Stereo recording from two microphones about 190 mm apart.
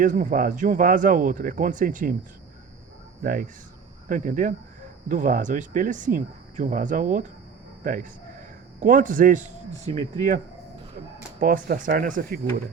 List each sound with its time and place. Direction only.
0.0 s speech: 40° right (ahead or behind)
3.2 s speech: 50° right (ahead or behind)
11.3 s speech: 50° right (ahead or behind)